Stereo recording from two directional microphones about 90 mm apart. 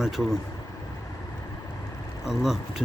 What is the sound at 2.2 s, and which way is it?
Speech, 5° right (ahead or behind).